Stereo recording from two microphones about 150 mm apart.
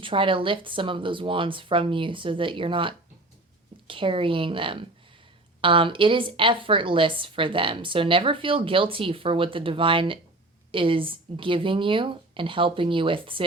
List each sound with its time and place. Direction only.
0.0 s a woman's voice: 35° right (ahead or behind)